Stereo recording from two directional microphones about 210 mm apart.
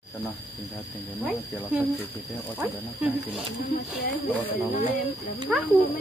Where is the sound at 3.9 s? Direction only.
50° left (ahead or behind).